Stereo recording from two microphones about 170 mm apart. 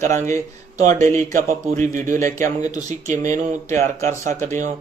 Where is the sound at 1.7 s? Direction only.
50° right (ahead or behind).